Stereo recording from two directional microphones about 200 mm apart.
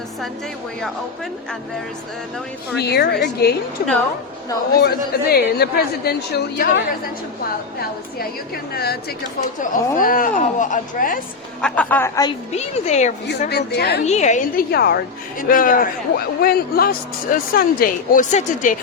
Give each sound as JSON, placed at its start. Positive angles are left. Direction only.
{"t": 2.7, "sound": "a woman's voice", "side_deg": 55}
{"t": 8.7, "sound": "a man's voice", "side_deg": 50}
{"t": 11.6, "sound": "a woman's voice", "side_deg": 5}
{"t": 12.5, "sound": "speech", "side_deg": 35}
{"t": 13.5, "sound": "a man's voice", "side_deg": 55}
{"t": 14.0, "sound": "speech", "side_deg": 35}
{"t": 14.7, "sound": "a man's voice", "side_deg": 50}